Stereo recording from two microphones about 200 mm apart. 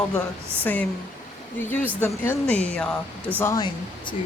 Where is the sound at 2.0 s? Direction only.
10° left (ahead or behind).